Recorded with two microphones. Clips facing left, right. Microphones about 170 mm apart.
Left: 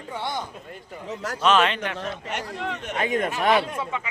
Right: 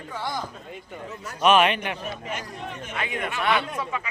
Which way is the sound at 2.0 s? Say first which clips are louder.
Left 2 dB; 80° left.